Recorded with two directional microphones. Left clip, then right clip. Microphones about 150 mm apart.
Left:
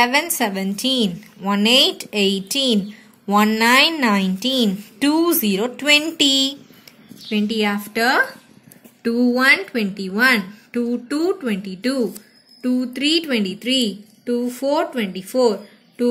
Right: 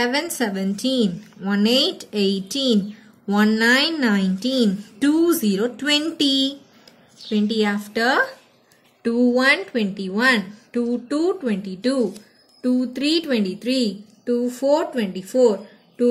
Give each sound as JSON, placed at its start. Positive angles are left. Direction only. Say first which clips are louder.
{"t": 0.4, "sound": "a woman's voice", "louder": "left 3 dB", "side_deg": 10}
{"t": 7.2, "sound": "a woman's voice", "louder": "left 1 dB", "side_deg": 25}